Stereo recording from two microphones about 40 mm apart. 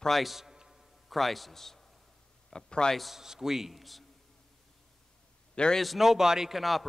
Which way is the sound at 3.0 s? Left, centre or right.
Centre.